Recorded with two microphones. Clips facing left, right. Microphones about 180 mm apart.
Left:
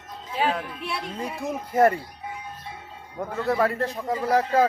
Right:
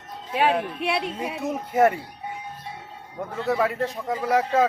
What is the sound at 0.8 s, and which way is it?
Speech, 70° right (ahead or behind).